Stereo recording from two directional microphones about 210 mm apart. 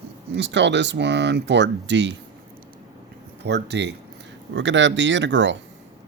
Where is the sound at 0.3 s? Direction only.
55° right (ahead or behind).